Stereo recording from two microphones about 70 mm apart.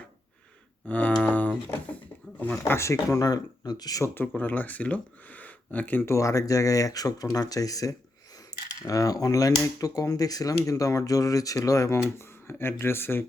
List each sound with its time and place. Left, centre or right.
0.9 s speech: centre
1.2 s a sound: left
2.4 s speech: left
2.7 s speech: left
4.0 s speech: left
6.1 s speech: left